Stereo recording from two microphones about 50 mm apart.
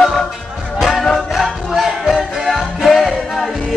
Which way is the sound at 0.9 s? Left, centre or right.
Centre.